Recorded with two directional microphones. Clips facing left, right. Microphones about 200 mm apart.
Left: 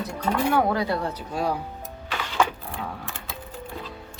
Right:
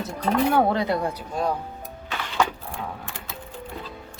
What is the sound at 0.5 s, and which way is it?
Speech, 25° right (ahead or behind).